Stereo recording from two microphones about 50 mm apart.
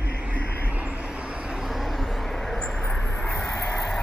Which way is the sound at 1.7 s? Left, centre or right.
Centre.